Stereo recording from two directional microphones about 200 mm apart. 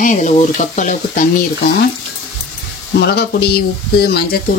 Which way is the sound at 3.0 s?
55° left (ahead or behind).